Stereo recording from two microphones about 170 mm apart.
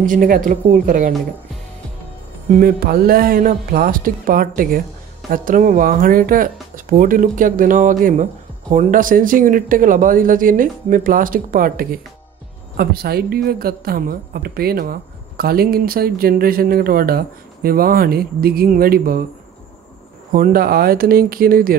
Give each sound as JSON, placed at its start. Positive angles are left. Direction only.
{"t": 0.0, "sound": "speech", "side_deg": -50}
{"t": 2.6, "sound": "a woman's voice", "side_deg": -60}
{"t": 20.3, "sound": "a woman's voice", "side_deg": -55}